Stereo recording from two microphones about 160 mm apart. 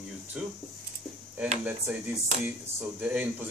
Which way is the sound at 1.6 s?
10° right (ahead or behind).